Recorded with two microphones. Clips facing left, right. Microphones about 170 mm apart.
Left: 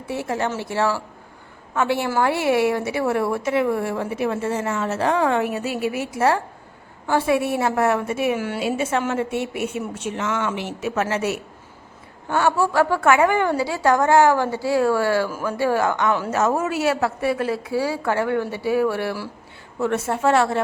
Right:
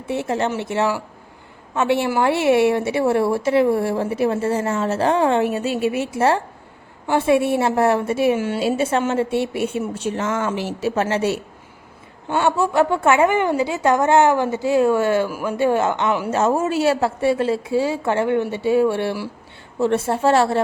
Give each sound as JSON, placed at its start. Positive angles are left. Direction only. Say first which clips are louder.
{"t": 0.1, "sound": "a woman's voice", "louder": "right 3 dB", "side_deg": -25}
{"t": 16.3, "sound": "a woman's voice", "louder": "right 2 dB", "side_deg": -25}